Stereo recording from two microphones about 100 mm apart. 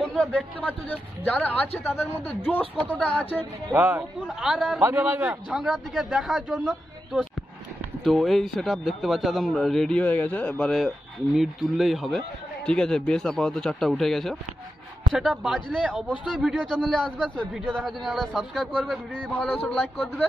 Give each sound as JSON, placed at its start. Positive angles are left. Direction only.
{"t": 0.0, "sound": "a sound", "side_deg": 10}
{"t": 0.7, "sound": "speech", "side_deg": 15}
{"t": 1.8, "sound": "speech", "side_deg": 25}
{"t": 2.2, "sound": "speech", "side_deg": 15}
{"t": 3.7, "sound": "a man's voice", "side_deg": -20}
{"t": 4.4, "sound": "a man's voice", "side_deg": -5}
{"t": 4.8, "sound": "a man's voice", "side_deg": -20}
{"t": 5.3, "sound": "a man's voice", "side_deg": -5}
{"t": 11.3, "sound": "a man's voice", "side_deg": -5}
{"t": 19.4, "sound": "speech", "side_deg": 15}